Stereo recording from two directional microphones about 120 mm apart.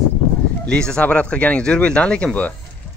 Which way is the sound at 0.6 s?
5° left (ahead or behind).